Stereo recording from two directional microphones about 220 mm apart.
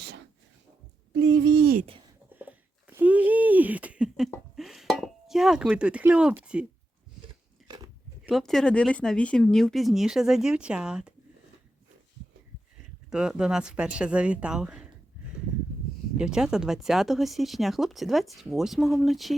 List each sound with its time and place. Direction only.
1.1 s speech: 55° right (ahead or behind)
2.3 s a sound: 10° right (ahead or behind)
8.2 s speech: centre (ahead or behind)
13.1 s speech: 5° right (ahead or behind)
16.1 s speech: 5° right (ahead or behind)